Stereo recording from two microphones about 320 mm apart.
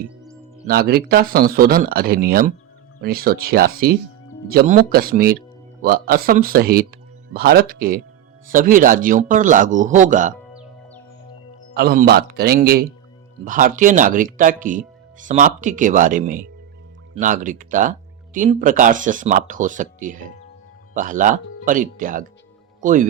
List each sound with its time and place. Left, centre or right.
0.7 s speech: right
10.5 s music: centre
11.7 s speech: right